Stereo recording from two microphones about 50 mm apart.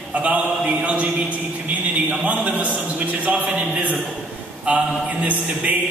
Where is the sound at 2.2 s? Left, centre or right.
Right.